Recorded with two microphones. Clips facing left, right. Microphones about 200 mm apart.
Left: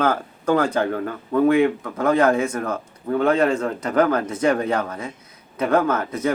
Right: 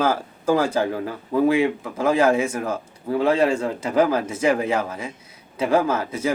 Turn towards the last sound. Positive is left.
turn(degrees=-10)  # may be behind; listen again after turning